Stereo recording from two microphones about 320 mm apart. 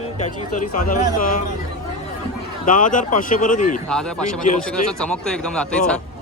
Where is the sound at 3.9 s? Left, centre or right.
Centre.